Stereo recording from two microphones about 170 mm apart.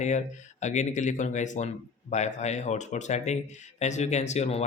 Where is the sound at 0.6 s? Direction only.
45° left (ahead or behind).